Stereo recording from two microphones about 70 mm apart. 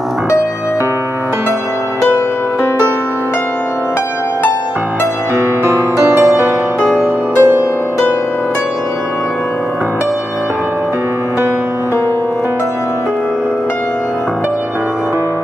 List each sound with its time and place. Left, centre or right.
5.6 s music: right
6.8 s music: centre
7.3 s music: right